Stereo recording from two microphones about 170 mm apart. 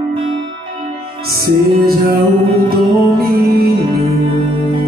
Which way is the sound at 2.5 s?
65° right (ahead or behind).